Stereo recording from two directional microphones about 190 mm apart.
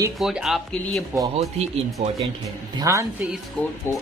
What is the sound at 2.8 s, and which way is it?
Speech, 15° right (ahead or behind).